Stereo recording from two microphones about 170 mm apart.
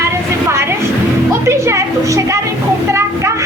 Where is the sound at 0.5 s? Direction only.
15° right (ahead or behind).